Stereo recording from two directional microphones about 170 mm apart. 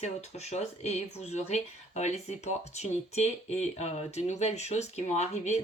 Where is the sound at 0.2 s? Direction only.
40° left (ahead or behind).